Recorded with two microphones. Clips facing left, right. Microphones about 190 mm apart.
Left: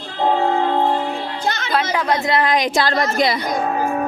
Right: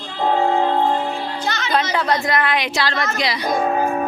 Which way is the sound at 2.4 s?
40° left (ahead or behind).